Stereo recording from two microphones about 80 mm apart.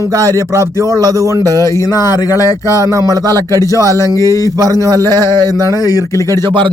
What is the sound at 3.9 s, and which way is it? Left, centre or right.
Speech, left.